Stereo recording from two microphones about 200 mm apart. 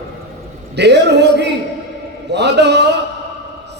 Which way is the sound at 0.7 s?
60° right (ahead or behind).